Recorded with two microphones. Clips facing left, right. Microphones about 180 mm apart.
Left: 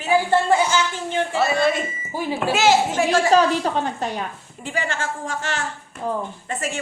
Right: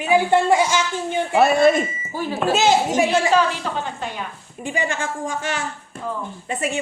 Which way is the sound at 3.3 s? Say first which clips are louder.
Left 2 dB; 40° left (ahead or behind).